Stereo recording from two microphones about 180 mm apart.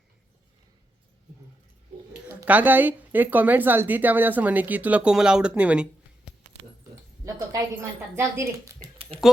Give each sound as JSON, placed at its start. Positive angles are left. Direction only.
{"t": 2.2, "sound": "speech", "side_deg": -10}
{"t": 7.3, "sound": "speech", "side_deg": -15}